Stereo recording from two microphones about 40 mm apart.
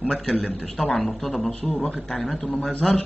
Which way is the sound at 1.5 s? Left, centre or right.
Left.